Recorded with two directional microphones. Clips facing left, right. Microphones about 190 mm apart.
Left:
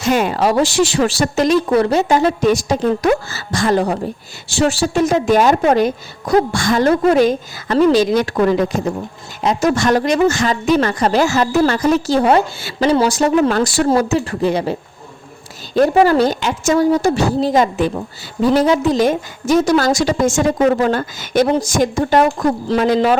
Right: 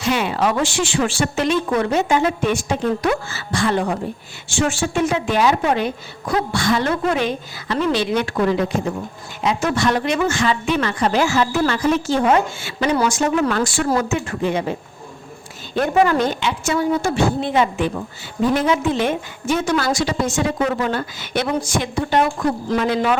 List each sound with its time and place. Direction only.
0.0 s a woman's voice: 45° left (ahead or behind)